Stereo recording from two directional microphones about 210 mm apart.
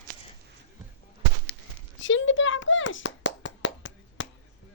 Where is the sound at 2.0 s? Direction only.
65° left (ahead or behind).